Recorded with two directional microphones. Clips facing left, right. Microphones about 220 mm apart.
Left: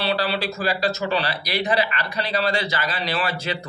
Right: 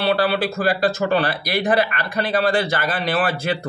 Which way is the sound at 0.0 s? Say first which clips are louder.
Right 5 dB; 50° right (ahead or behind).